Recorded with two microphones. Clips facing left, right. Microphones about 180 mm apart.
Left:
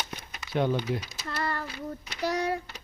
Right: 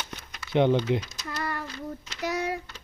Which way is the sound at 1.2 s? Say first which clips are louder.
Left 1 dB; 15° right (ahead or behind).